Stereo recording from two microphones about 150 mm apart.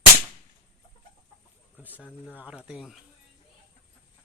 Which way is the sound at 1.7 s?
10° right (ahead or behind).